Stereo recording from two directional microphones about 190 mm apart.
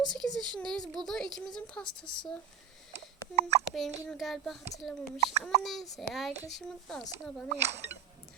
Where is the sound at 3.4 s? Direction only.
35° right (ahead or behind).